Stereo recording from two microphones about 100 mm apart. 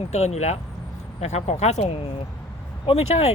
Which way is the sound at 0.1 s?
90° left.